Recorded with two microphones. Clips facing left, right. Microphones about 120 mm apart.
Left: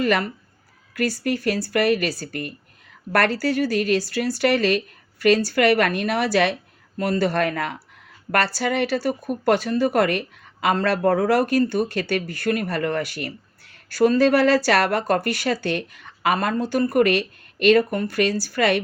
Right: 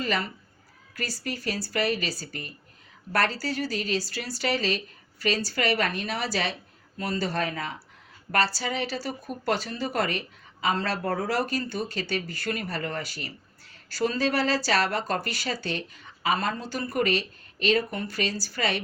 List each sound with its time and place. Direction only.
0.0 s speech: 60° left (ahead or behind)